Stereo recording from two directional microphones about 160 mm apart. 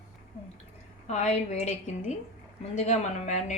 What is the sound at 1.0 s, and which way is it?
A woman's voice, 45° left (ahead or behind).